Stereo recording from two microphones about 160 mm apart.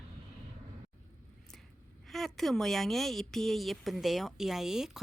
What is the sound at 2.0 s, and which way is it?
A woman's voice, centre (ahead or behind).